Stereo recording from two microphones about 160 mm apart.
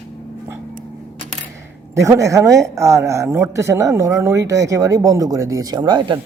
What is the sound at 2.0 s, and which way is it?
A woman's voice, 20° right (ahead or behind).